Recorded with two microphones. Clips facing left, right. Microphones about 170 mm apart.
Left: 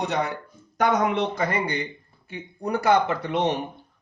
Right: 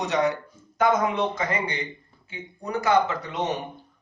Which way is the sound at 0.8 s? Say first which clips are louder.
Even; 70° left (ahead or behind).